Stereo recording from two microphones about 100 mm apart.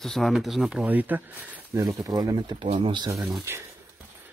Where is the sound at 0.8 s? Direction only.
15° right (ahead or behind).